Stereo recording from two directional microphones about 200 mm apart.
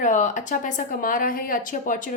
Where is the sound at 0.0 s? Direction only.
40° left (ahead or behind).